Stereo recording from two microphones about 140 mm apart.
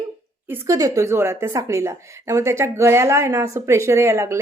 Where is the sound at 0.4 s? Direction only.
20° right (ahead or behind).